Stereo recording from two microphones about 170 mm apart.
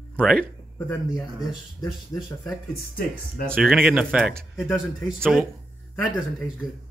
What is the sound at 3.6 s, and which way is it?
Speech, 5° right (ahead or behind).